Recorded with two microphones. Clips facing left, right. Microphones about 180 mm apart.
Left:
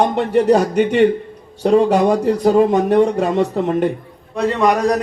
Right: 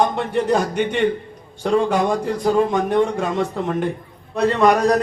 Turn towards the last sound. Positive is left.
turn(degrees=15)  # may be behind; listen again after turning